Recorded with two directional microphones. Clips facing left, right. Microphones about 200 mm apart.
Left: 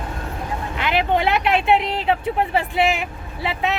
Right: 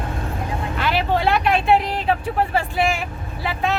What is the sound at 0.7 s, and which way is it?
Vehicle, 20° left (ahead or behind).